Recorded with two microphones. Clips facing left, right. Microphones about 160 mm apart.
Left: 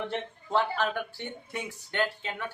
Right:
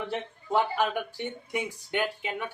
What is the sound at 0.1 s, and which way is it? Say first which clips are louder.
Speech: right 1 dB; 15° right (ahead or behind).